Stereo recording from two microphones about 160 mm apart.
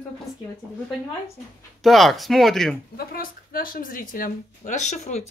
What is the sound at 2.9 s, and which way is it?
Speech, 65° left (ahead or behind).